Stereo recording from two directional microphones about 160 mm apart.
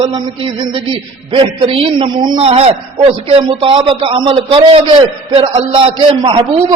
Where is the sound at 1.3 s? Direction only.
35° right (ahead or behind).